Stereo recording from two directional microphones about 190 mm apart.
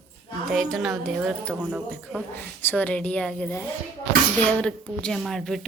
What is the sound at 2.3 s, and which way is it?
A woman's voice, 10° left (ahead or behind).